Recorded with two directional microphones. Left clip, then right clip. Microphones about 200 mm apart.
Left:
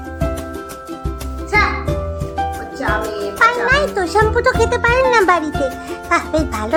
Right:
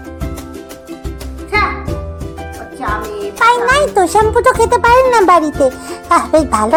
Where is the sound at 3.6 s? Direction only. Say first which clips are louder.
Right 5 dB; 20° right (ahead or behind).